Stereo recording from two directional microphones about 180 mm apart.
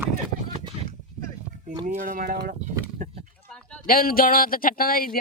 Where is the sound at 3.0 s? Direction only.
45° right (ahead or behind).